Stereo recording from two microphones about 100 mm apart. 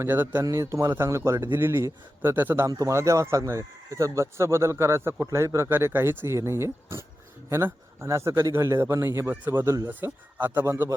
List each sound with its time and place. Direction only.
0.0 s speech: 20° right (ahead or behind)
2.6 s speech: 35° right (ahead or behind)